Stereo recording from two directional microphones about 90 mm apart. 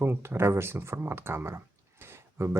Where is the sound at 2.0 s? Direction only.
30° right (ahead or behind).